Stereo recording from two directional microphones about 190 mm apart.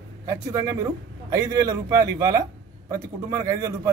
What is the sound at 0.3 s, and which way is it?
Speech, 15° right (ahead or behind).